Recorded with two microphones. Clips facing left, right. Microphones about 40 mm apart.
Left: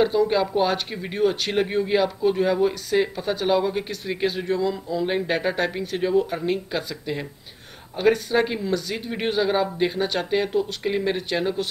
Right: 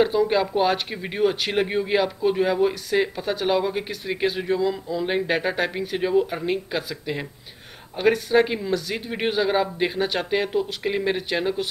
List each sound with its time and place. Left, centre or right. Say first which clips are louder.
0.0 s speech: even; centre